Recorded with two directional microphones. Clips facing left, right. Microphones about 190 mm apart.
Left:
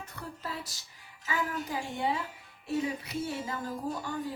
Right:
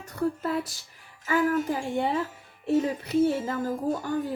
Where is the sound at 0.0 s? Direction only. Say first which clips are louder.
Right 13 dB; 45° right (ahead or behind).